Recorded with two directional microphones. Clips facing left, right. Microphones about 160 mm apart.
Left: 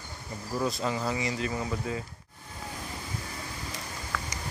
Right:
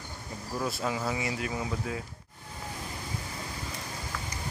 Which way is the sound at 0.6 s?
5° right (ahead or behind).